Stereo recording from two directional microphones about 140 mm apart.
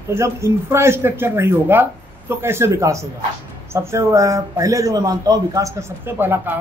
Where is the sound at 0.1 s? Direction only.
20° right (ahead or behind).